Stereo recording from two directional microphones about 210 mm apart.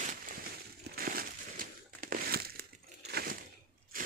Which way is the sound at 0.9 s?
45° right (ahead or behind).